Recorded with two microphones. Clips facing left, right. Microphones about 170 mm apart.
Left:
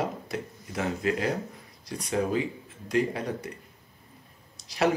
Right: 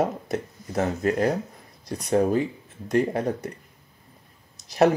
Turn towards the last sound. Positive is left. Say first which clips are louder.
# right 6 dB
turn(degrees=-45)  # may be behind; listen again after turning